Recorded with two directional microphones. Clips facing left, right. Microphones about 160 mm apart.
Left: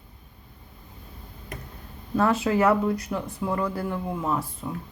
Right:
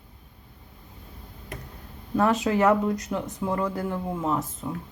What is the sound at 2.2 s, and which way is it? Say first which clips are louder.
Speech: even; 20° right (ahead or behind).